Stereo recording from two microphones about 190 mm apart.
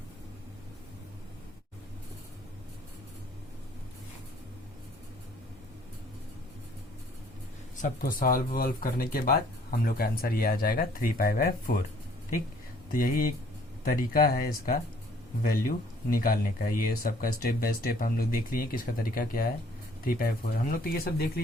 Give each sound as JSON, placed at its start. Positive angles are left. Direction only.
{"t": 7.8, "sound": "speech", "side_deg": 45}
{"t": 12.9, "sound": "speech", "side_deg": 45}
{"t": 16.0, "sound": "speech", "side_deg": 50}